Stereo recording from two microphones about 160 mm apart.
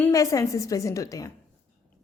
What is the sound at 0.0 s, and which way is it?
A woman's voice, 20° left (ahead or behind).